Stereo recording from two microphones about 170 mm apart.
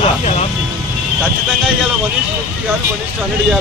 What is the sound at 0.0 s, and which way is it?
Vehicle, 40° left (ahead or behind).